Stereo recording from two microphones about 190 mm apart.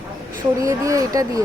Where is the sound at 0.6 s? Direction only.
15° right (ahead or behind).